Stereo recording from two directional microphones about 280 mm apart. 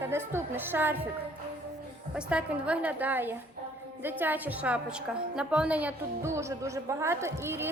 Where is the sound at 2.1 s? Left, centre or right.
Centre.